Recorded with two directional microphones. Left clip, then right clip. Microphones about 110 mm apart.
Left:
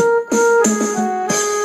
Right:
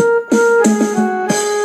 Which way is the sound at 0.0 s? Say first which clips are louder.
Right 2 dB; 35° right (ahead or behind).